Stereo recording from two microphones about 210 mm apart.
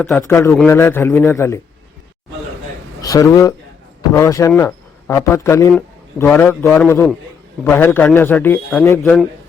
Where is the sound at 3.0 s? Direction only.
15° left (ahead or behind).